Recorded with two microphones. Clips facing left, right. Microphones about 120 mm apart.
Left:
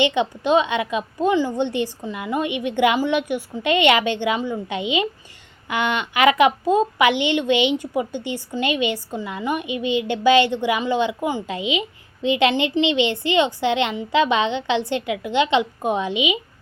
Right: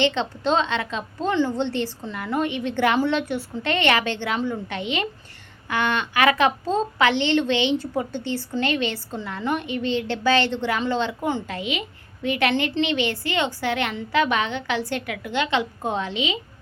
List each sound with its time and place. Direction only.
0.0 s a woman's voice: 15° left (ahead or behind)